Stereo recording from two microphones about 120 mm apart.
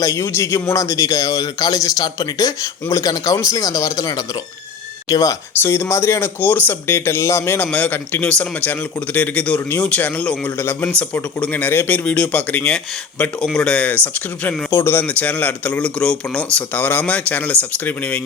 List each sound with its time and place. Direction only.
0.0 s a man's voice: 25° left (ahead or behind)